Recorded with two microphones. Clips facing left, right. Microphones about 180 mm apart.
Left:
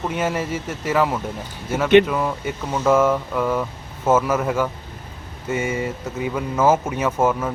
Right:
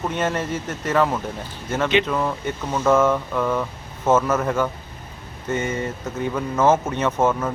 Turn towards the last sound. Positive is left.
turn(degrees=5)  # may be behind; listen again after turning